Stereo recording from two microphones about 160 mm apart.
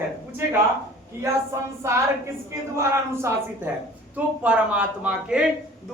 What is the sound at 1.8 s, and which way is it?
A woman's voice, 15° right (ahead or behind).